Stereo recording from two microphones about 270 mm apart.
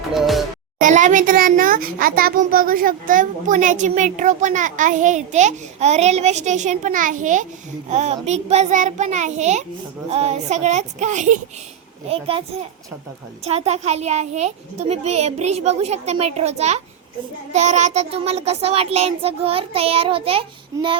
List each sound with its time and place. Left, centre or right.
0.1 s music: centre
0.8 s a child's voice: right